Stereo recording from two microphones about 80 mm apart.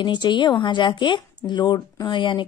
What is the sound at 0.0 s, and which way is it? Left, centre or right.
Speech, left.